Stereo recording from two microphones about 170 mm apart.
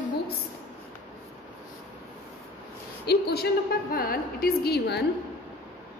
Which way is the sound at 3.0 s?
70° left (ahead or behind).